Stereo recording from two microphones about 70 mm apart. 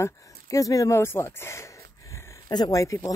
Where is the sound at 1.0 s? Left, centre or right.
Left.